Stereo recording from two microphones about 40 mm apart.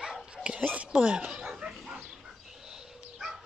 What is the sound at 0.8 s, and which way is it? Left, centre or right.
Speech, right.